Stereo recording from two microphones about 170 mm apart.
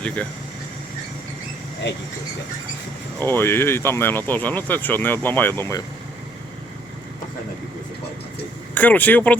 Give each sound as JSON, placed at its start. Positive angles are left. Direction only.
{"t": 1.8, "sound": "speech", "side_deg": 90}
{"t": 3.2, "sound": "speech", "side_deg": 10}
{"t": 8.7, "sound": "speech", "side_deg": 10}